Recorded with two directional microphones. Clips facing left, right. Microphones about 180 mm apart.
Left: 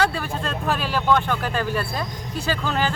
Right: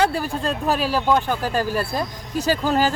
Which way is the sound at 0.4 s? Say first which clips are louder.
Right 4 dB; 35° right (ahead or behind).